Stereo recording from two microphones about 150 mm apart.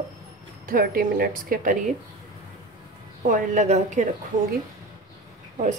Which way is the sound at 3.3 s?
55° right (ahead or behind).